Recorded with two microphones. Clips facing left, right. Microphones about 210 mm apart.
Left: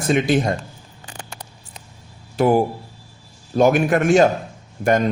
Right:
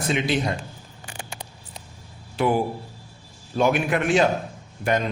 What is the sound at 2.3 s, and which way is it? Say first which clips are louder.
Speech: left 5 dB; 45° left (ahead or behind).